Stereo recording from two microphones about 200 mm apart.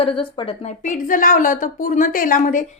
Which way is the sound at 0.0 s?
25° left (ahead or behind).